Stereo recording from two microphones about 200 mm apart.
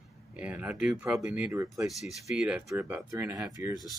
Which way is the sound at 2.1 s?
5° right (ahead or behind).